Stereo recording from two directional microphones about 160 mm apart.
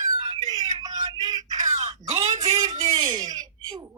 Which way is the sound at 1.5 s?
45° right (ahead or behind).